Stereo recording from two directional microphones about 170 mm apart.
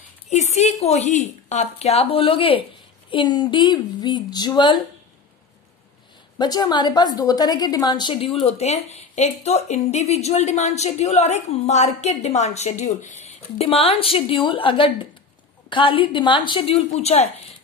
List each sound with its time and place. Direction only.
0.3 s a woman's voice: 40° left (ahead or behind); by 4.8 s 25° left (ahead or behind)
6.3 s a woman's voice: 25° left (ahead or behind)